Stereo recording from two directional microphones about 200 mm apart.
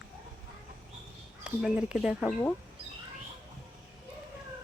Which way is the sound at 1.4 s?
5° right (ahead or behind).